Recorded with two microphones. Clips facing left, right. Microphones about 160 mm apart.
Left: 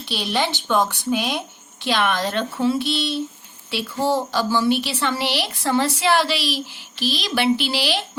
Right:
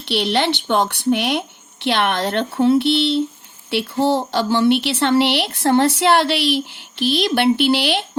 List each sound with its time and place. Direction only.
0.0 s speech: 65° right (ahead or behind)